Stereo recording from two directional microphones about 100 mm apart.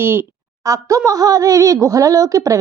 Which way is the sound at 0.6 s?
35° right (ahead or behind).